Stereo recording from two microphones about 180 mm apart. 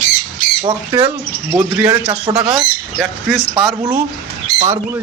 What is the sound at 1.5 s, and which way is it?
Speech, 10° right (ahead or behind).